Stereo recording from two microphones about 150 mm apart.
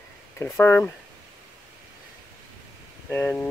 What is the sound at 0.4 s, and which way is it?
Speech, 15° left (ahead or behind).